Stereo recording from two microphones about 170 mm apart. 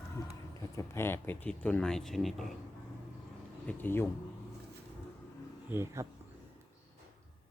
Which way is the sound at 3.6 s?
15° left (ahead or behind).